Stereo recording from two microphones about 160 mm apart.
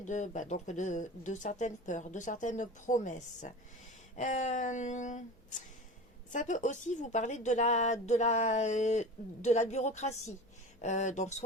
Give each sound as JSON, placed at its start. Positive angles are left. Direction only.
{"t": 0.0, "sound": "a woman's voice", "side_deg": 50}